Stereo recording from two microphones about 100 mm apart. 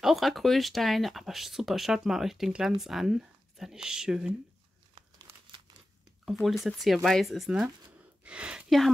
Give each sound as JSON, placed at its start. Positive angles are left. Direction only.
{"t": 0.0, "sound": "speech", "side_deg": 0}
{"t": 5.3, "sound": "crumpling", "side_deg": -25}
{"t": 6.6, "sound": "speech", "side_deg": 0}
{"t": 8.2, "sound": "a sound", "side_deg": -10}
{"t": 8.6, "sound": "speech", "side_deg": 0}